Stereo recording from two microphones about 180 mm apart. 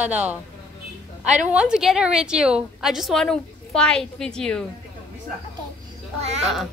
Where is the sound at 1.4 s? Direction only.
5° right (ahead or behind).